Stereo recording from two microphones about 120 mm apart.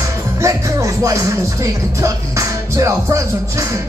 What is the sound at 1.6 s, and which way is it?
Music, 25° right (ahead or behind).